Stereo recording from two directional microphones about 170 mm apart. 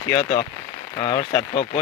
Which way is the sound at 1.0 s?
35° left (ahead or behind).